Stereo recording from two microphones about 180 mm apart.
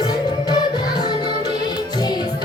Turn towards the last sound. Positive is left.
turn(degrees=25)  # may be behind; listen again after turning